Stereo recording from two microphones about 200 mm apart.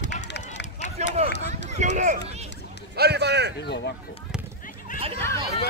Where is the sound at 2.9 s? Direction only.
55° right (ahead or behind).